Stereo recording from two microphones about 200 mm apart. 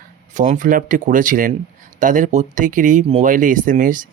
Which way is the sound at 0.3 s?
40° right (ahead or behind).